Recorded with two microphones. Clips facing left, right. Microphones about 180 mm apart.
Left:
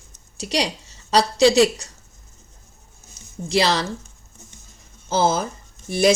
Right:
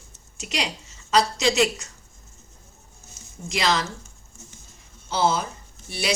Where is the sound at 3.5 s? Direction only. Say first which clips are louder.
Left 4 dB; 35° left (ahead or behind).